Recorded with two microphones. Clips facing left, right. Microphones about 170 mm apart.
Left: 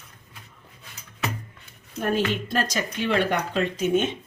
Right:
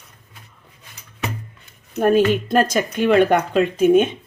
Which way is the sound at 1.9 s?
50° right (ahead or behind).